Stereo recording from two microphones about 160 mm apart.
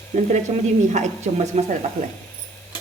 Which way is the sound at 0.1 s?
50° right (ahead or behind).